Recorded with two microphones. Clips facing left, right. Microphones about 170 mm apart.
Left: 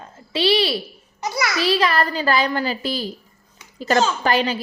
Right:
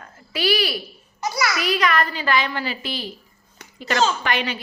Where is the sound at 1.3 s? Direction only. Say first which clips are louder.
Left 3 dB; 25° left (ahead or behind).